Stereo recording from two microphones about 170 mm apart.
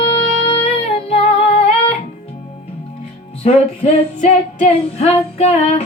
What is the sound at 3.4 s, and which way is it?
Female singing, 40° left (ahead or behind).